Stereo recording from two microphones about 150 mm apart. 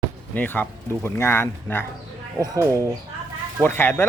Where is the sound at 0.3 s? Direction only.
10° left (ahead or behind).